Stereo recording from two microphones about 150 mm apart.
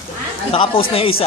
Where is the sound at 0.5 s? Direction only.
35° left (ahead or behind).